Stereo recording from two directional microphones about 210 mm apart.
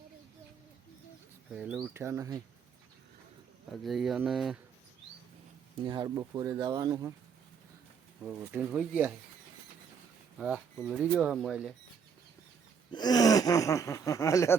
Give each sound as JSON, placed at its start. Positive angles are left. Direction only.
{"t": 1.5, "sound": "speech", "side_deg": -5}
{"t": 3.7, "sound": "speech", "side_deg": 0}
{"t": 5.8, "sound": "speech", "side_deg": -20}
{"t": 8.4, "sound": "speech", "side_deg": -5}
{"t": 10.3, "sound": "speech", "side_deg": -5}
{"t": 12.9, "sound": "gasp", "side_deg": 20}